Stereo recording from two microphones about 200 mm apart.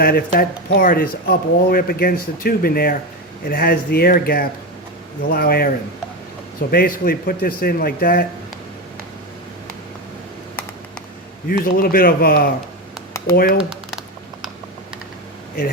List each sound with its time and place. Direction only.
0.0 s speech: 50° left (ahead or behind)
11.4 s speech: 45° left (ahead or behind)
13.6 s a sound: 5° right (ahead or behind)